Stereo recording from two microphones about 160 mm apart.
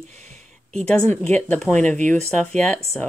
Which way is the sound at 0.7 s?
5° left (ahead or behind).